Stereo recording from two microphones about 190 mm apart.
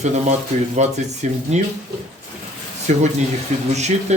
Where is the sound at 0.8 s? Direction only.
40° right (ahead or behind).